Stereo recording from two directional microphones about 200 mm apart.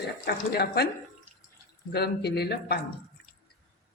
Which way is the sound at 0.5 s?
55° left (ahead or behind).